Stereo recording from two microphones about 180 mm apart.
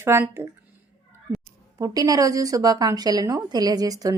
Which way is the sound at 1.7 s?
20° right (ahead or behind).